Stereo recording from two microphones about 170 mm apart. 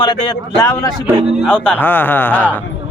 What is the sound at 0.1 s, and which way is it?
Speech, 25° left (ahead or behind).